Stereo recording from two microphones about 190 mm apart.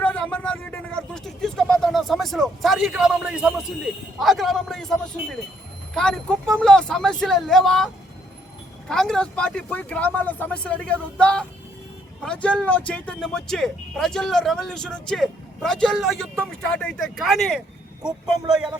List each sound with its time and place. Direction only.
0.0 s a sound: 5° left (ahead or behind)
4.2 s speech: centre (ahead or behind)
8.9 s speech: 5° left (ahead or behind)